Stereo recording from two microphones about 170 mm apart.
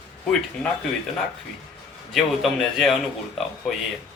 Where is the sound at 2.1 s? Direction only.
Centre (ahead or behind).